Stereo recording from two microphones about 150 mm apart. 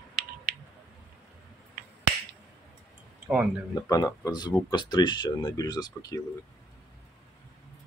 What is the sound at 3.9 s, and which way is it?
Speech, 25° left (ahead or behind).